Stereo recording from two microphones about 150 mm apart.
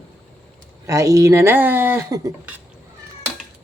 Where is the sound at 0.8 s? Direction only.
20° right (ahead or behind).